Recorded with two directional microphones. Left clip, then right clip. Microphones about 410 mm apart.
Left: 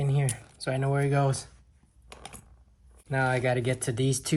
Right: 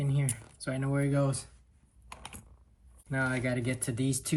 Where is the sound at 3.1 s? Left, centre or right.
Left.